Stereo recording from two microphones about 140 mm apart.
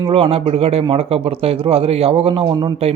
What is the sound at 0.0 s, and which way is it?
A man's voice, 45° right (ahead or behind).